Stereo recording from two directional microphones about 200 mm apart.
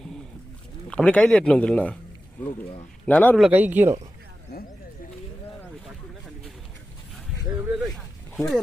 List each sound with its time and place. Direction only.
0.0 s a sound: centre (ahead or behind)
0.9 s a man's voice: 5° left (ahead or behind)
2.5 s speech: 35° left (ahead or behind)
3.1 s a man's voice: 5° left (ahead or behind)
7.3 s a sound: centre (ahead or behind)
8.4 s a man's voice: centre (ahead or behind)